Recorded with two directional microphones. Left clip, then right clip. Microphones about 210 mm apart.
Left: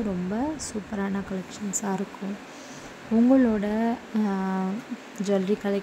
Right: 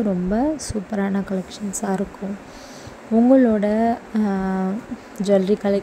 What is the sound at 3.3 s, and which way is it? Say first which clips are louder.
Speech: right 7 dB; 10° right (ahead or behind).